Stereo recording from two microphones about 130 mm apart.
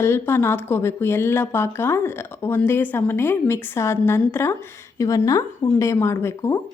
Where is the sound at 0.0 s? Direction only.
20° left (ahead or behind).